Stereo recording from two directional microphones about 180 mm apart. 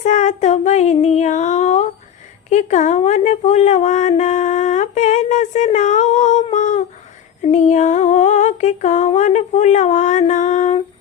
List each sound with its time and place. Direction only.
0.0 s female singing: 40° left (ahead or behind)
2.5 s speech: 40° left (ahead or behind)
7.4 s female singing: 40° left (ahead or behind)